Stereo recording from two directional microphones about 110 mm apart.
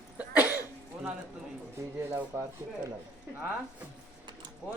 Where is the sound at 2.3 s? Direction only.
25° right (ahead or behind).